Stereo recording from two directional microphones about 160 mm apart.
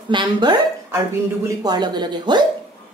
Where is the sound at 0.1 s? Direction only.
30° right (ahead or behind).